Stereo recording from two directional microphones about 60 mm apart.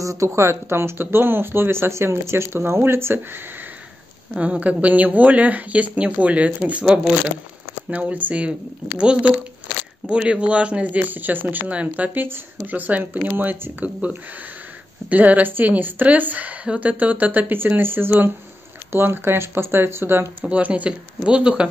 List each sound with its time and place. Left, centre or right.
0.0 s speech: right
4.4 s speech: right
20.4 s speech: right